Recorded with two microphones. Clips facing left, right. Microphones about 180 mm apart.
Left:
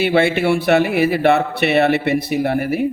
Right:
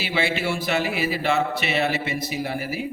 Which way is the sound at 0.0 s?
60° left (ahead or behind).